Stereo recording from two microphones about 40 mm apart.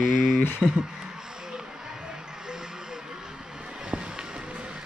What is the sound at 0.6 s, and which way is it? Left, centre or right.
Speech, right.